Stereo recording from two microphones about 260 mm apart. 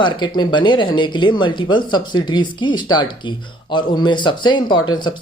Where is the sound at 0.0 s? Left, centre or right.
Centre.